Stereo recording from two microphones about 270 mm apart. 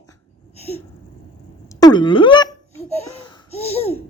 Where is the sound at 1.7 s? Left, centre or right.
Centre.